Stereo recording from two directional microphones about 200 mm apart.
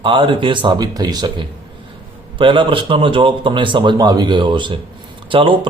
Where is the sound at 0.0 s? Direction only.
25° right (ahead or behind).